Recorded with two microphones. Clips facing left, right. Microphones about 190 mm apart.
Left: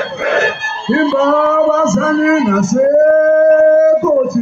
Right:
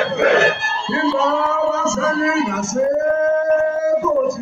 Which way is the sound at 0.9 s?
55° left (ahead or behind).